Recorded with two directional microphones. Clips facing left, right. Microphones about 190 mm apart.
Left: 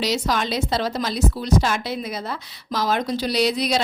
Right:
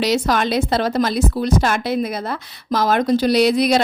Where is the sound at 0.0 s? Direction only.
55° right (ahead or behind).